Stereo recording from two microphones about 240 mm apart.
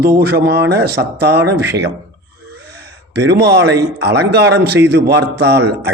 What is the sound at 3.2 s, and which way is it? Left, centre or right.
A man's voice, right.